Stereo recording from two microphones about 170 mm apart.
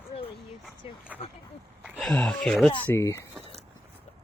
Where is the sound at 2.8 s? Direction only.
15° left (ahead or behind).